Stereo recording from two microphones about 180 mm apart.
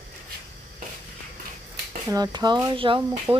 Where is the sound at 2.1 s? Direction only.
20° right (ahead or behind).